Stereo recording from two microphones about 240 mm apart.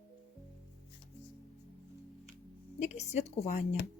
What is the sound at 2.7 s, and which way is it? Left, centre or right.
Speech, left.